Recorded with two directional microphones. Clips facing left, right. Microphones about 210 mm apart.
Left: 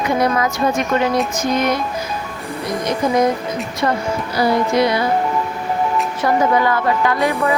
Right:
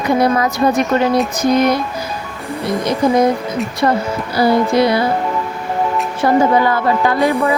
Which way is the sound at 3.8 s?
35° right (ahead or behind).